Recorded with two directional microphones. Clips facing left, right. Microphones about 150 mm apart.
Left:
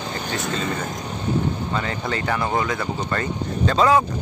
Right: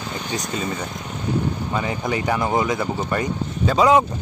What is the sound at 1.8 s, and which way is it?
Speech, 15° right (ahead or behind).